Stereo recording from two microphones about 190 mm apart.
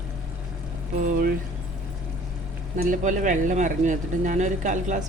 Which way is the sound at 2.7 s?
40° right (ahead or behind).